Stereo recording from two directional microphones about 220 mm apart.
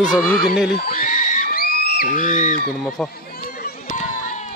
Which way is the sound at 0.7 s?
40° left (ahead or behind).